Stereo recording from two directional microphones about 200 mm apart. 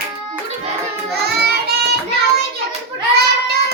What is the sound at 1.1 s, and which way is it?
Child singing, 55° right (ahead or behind).